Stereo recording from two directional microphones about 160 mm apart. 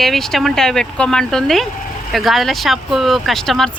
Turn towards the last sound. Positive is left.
turn(degrees=0)  # may be behind; listen again after turning